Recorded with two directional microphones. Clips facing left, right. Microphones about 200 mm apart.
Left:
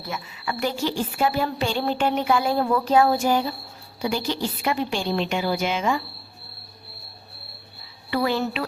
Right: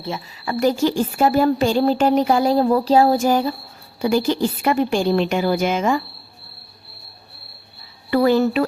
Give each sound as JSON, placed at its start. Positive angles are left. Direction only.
{"t": 0.0, "sound": "a woman's voice", "side_deg": -30}
{"t": 0.5, "sound": "a woman's voice", "side_deg": -45}
{"t": 8.1, "sound": "a woman's voice", "side_deg": -45}